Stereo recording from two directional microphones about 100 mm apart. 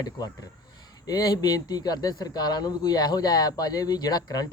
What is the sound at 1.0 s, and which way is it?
Speech, 40° left (ahead or behind).